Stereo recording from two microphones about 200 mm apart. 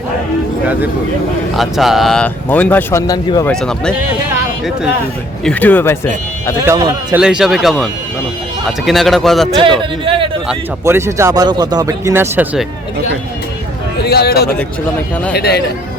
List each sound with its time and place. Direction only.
1.5 s speech: centre (ahead or behind); by 3.5 s 20° left (ahead or behind)
3.5 s speech: 5° left (ahead or behind)
5.4 s speech: 5° left (ahead or behind)
6.7 s speech: 15° right (ahead or behind)
7.2 s speech: 5° right (ahead or behind)
9.6 s speech: 25° right (ahead or behind)
10.5 s speech: 10° right (ahead or behind)
14.0 s speech: 55° left (ahead or behind)